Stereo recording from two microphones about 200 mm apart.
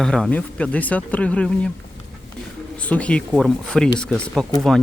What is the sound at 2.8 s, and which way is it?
Speech, 5° left (ahead or behind).